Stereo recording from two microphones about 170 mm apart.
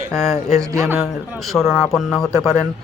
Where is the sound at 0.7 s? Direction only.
15° right (ahead or behind).